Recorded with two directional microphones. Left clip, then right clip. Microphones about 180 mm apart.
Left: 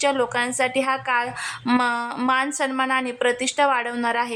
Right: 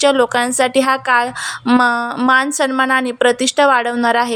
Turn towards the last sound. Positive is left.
turn(degrees=-30)  # may be behind; listen again after turning